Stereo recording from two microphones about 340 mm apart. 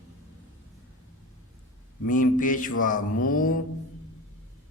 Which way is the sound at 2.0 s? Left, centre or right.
Left.